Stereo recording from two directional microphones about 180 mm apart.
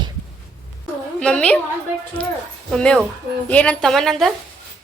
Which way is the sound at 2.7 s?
5° left (ahead or behind).